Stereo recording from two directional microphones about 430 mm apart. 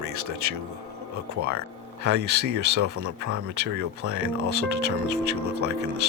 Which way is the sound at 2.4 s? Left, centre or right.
Right.